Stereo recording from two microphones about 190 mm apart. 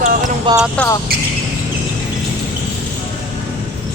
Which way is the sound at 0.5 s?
25° right (ahead or behind).